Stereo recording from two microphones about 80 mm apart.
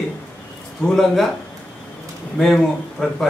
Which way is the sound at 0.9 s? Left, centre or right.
Centre.